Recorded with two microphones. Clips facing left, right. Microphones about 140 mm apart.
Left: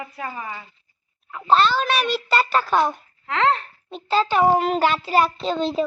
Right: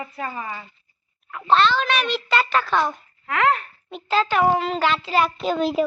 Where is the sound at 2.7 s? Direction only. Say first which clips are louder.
Left 2 dB; 20° left (ahead or behind).